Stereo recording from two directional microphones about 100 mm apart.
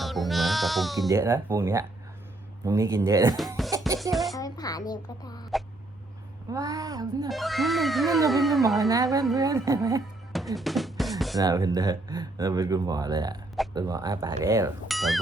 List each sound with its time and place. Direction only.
0.0 s sheep: centre (ahead or behind)
1.0 s speech: 30° right (ahead or behind)
3.7 s music: 35° right (ahead or behind)
4.1 s speech: centre (ahead or behind)
4.4 s a woman's voice: 40° left (ahead or behind)
6.5 s speech: 40° right (ahead or behind)
7.3 s speech: centre (ahead or behind)
9.3 s speech: 35° right (ahead or behind)
10.3 s drum: centre (ahead or behind)
11.3 s speech: 40° right (ahead or behind)
14.8 s speech: centre (ahead or behind)